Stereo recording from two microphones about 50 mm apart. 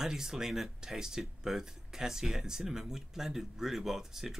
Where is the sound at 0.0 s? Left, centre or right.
Centre.